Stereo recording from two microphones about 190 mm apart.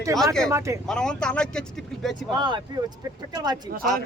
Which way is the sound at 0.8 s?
5° left (ahead or behind).